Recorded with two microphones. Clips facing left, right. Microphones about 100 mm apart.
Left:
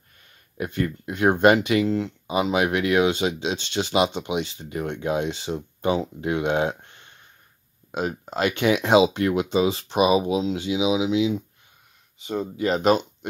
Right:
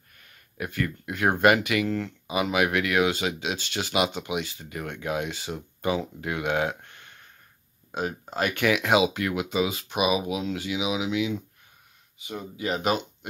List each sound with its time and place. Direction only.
0.6 s speech: 25° left (ahead or behind)